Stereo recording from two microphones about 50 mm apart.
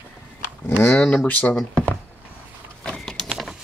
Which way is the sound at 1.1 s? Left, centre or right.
Left.